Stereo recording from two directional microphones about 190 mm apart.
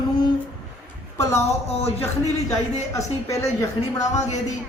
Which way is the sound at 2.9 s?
15° left (ahead or behind).